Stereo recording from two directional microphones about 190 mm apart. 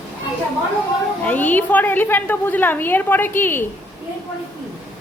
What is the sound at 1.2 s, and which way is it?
A woman's voice, 10° left (ahead or behind).